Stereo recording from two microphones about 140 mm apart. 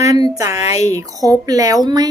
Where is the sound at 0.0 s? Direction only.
25° right (ahead or behind).